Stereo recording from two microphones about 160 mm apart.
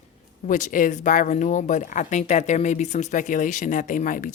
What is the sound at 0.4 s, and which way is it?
Speech, 55° left (ahead or behind).